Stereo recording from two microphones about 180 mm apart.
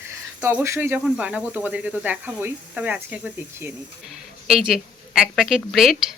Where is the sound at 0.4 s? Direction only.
15° right (ahead or behind).